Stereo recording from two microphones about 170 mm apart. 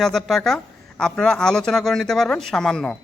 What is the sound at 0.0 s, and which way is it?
Speech, centre (ahead or behind).